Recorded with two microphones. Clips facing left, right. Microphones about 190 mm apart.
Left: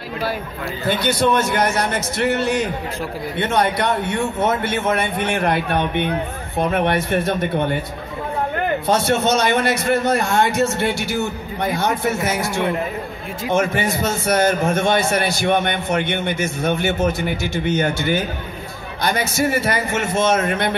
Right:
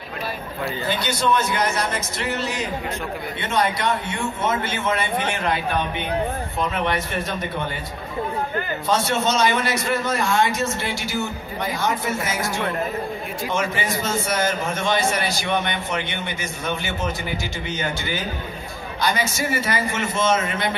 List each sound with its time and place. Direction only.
0.8 s a man's voice: 60° left (ahead or behind)